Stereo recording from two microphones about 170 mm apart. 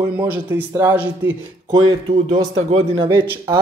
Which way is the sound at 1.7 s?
30° right (ahead or behind).